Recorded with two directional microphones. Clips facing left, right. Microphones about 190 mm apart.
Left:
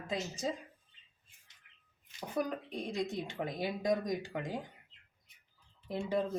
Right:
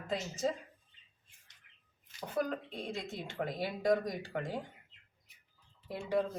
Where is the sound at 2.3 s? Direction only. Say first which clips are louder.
Even; 15° left (ahead or behind).